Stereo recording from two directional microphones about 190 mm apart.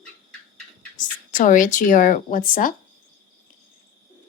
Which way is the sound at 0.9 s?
40° left (ahead or behind).